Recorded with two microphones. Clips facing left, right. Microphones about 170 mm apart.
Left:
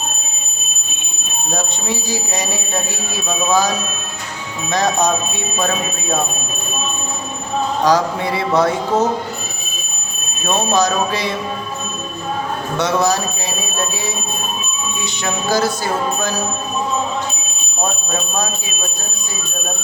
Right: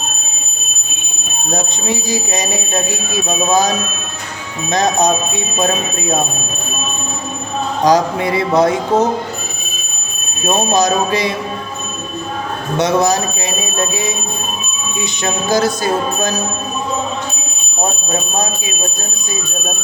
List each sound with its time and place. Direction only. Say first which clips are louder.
1.5 s speech: right 3 dB; 15° right (ahead or behind)
7.9 s speech: right 4 dB; 15° right (ahead or behind)
10.4 s speech: right 2 dB; 15° right (ahead or behind)
12.7 s speech: right 3 dB; 15° right (ahead or behind)
15.2 s speech: right 2 dB; 15° right (ahead or behind)